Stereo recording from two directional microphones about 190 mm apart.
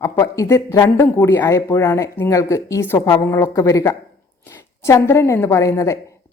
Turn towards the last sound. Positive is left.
turn(degrees=15)  # may be behind; listen again after turning